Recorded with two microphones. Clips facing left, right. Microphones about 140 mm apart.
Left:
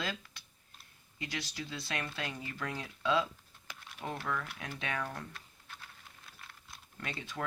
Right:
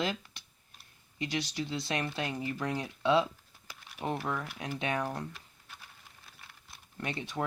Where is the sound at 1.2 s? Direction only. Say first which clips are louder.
Right 7 dB; 15° right (ahead or behind).